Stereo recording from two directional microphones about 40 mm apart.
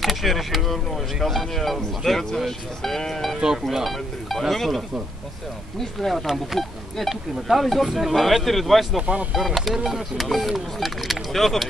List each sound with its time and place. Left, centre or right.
0.0 s speech: centre
9.0 s speech: right
9.3 s speech: centre